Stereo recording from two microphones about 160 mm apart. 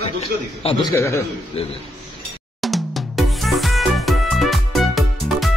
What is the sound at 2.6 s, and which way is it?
Music, centre (ahead or behind).